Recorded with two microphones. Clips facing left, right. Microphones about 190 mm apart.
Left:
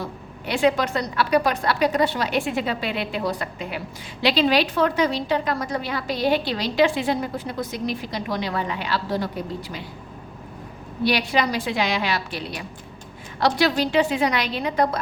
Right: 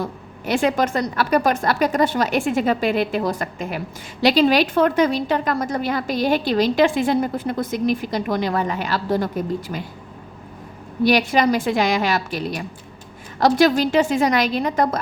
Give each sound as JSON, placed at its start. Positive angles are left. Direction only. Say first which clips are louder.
{"t": 0.4, "sound": "a woman's voice", "louder": "right 2 dB", "side_deg": -50}
{"t": 11.0, "sound": "a woman's voice", "louder": "right 5 dB", "side_deg": -45}